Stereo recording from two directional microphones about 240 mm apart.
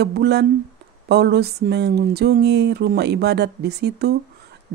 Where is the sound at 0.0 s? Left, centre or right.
Right.